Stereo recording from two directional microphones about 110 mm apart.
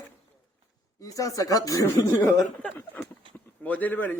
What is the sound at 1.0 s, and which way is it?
Speech, 30° left (ahead or behind).